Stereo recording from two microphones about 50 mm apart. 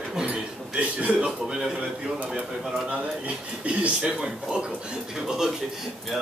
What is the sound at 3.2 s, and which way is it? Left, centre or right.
Speech, right.